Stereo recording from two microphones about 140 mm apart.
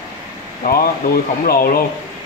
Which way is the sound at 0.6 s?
90° left.